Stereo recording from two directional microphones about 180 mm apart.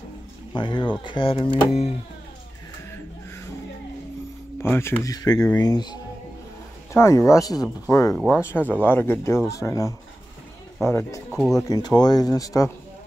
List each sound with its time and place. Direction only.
0.6 s speech: 25° left (ahead or behind)
4.6 s speech: 15° left (ahead or behind)